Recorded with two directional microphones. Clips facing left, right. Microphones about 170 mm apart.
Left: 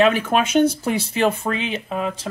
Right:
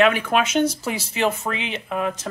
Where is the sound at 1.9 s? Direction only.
30° left (ahead or behind).